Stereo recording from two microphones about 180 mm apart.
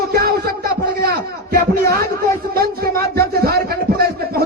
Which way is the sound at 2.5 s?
55° right (ahead or behind).